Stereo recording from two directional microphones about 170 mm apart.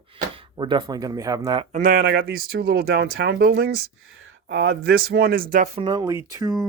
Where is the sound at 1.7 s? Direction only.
55° right (ahead or behind).